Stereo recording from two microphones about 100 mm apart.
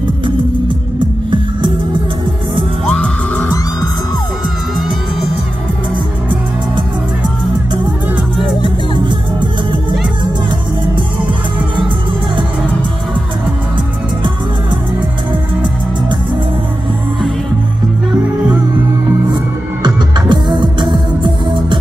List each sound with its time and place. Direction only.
2.9 s music: 10° left (ahead or behind)
19.3 s music: 50° right (ahead or behind)